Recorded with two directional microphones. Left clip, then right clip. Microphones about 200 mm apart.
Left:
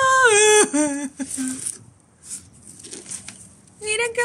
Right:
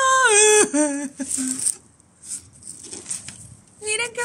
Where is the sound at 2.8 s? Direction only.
15° right (ahead or behind).